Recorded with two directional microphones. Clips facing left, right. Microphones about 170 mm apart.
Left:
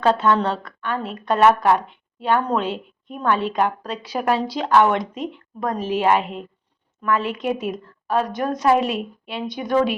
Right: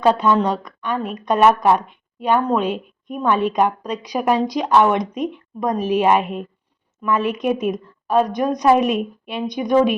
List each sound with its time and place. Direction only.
0.0 s a woman's voice: 10° right (ahead or behind)